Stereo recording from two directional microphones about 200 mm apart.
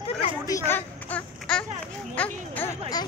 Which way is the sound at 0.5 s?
15° left (ahead or behind).